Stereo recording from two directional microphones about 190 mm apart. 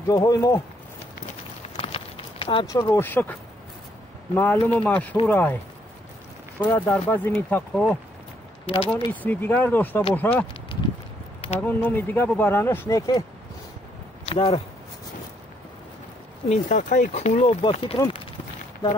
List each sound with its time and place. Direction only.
0.1 s speech: 20° left (ahead or behind)
1.8 s a sound: 30° left (ahead or behind); by 3.3 s 10° left (ahead or behind)
4.4 s speech: 10° left (ahead or behind)
6.6 s speech: 10° left (ahead or behind)
8.6 s speech: 30° left (ahead or behind)
9.1 s speech: 10° left (ahead or behind)
11.6 s speech: 10° left (ahead or behind)
14.3 s speech: 30° left (ahead or behind)
16.4 s speech: 40° left (ahead or behind)